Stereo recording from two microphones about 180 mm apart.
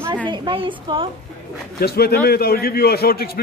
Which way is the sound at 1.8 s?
60° left (ahead or behind).